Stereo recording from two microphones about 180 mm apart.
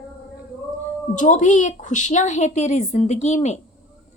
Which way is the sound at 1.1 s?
45° left (ahead or behind).